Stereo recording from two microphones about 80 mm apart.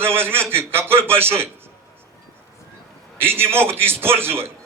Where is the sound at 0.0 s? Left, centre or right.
Right.